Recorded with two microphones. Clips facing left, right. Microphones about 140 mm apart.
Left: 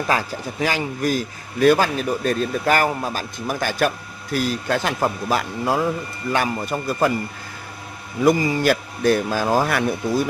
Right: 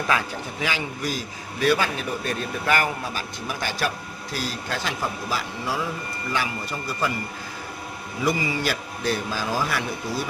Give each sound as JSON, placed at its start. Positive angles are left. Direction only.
{"t": 0.1, "sound": "a man's voice", "side_deg": 40}
{"t": 8.2, "sound": "a man's voice", "side_deg": 50}